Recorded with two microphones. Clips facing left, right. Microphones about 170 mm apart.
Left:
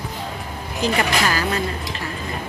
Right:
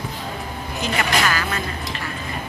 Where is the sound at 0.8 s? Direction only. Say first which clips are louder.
Left 2 dB; 35° left (ahead or behind).